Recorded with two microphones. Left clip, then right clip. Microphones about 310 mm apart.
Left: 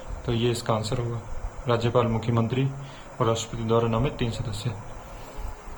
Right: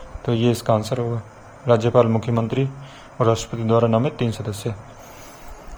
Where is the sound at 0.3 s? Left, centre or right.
Centre.